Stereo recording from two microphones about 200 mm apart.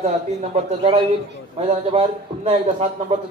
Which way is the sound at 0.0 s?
35° right (ahead or behind).